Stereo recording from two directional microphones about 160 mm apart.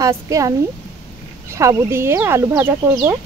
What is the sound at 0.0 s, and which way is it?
Speech, 20° right (ahead or behind).